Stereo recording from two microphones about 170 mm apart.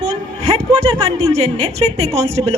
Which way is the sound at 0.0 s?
35° right (ahead or behind).